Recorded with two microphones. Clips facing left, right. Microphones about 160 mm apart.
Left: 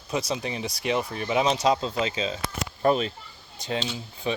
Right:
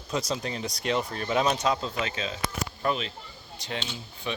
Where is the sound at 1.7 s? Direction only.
25° left (ahead or behind).